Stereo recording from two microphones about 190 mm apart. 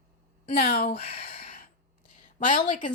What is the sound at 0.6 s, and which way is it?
Speech, 55° left (ahead or behind).